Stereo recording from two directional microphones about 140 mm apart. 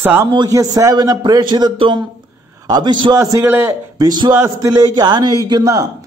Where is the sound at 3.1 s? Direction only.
20° right (ahead or behind).